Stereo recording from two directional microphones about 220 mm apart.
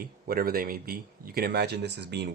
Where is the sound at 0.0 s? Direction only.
40° right (ahead or behind).